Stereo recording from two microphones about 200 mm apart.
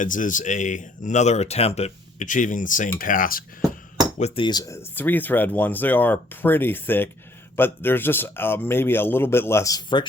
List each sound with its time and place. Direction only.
0.0 s speech: 40° left (ahead or behind)
4.2 s speech: 25° left (ahead or behind)